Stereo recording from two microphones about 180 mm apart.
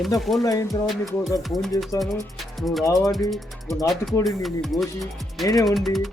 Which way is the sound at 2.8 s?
20° left (ahead or behind).